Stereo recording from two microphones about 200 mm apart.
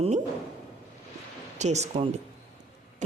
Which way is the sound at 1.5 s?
35° right (ahead or behind).